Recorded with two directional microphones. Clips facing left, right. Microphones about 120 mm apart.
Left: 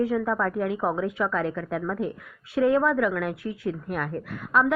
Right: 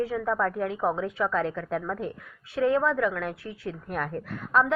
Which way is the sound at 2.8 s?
25° right (ahead or behind).